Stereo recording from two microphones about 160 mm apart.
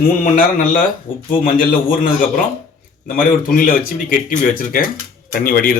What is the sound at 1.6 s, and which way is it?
Speech, 65° left (ahead or behind).